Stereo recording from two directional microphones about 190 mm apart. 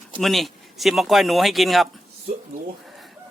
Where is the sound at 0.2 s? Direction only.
Centre (ahead or behind).